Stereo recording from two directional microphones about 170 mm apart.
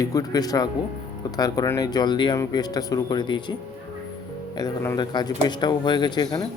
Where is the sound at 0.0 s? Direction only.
20° left (ahead or behind).